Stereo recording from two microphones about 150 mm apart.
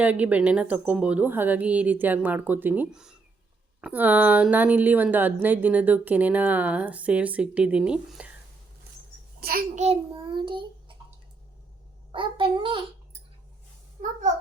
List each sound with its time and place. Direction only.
0.0 s speech: 10° right (ahead or behind)
9.4 s a child's voice: 85° right
9.7 s a child's voice: 45° right (ahead or behind)
10.1 s a child's voice: 35° right (ahead or behind)
12.1 s a child's voice: 35° right (ahead or behind)